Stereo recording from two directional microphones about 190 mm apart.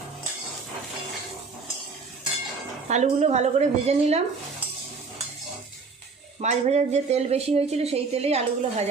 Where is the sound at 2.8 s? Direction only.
35° right (ahead or behind).